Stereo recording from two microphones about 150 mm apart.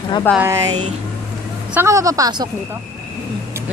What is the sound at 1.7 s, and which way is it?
Speech, 20° right (ahead or behind).